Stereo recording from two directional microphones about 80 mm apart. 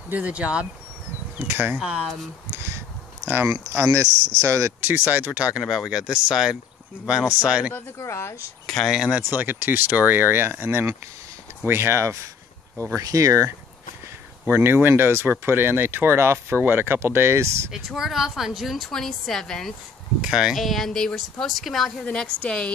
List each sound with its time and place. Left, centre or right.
0.1 s speech: centre
1.4 s speech: right
3.7 s speech: right
4.8 s speech: right
5.6 s speech: centre
7.7 s speech: left
8.6 s speech: centre
8.9 s speech: centre
9.2 s speech: right
14.4 s speech: right
17.6 s a woman's voice: centre
20.2 s a woman's voice: centre
22.0 s a woman's voice: centre